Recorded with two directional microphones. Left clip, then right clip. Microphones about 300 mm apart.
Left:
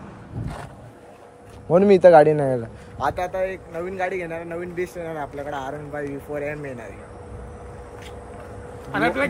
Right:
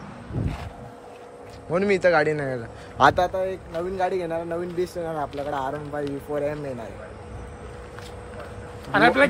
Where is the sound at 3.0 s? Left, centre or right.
Right.